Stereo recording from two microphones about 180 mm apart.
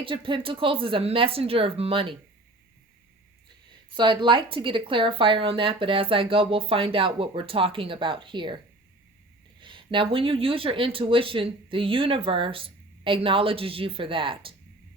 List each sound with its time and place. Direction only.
0.0 s speech: 30° right (ahead or behind)
3.8 s speech: 25° right (ahead or behind)